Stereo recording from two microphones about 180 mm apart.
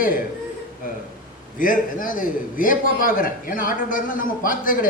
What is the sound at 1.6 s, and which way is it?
A man's voice, 50° left (ahead or behind).